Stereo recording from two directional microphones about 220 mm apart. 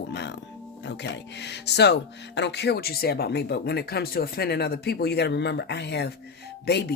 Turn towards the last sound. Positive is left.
turn(degrees=50)  # may be behind; listen again after turning